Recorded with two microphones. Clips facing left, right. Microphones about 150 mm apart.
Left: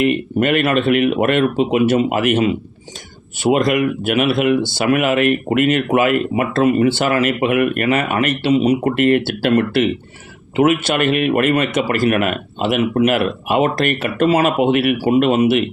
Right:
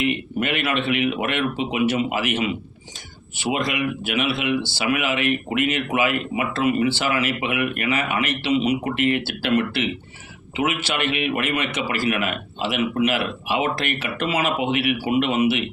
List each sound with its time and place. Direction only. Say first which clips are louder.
0.0 s speech: left 7 dB; 50° left (ahead or behind)